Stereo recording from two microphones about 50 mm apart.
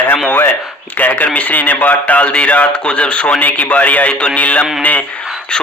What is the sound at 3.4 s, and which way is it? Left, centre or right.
Speech, left.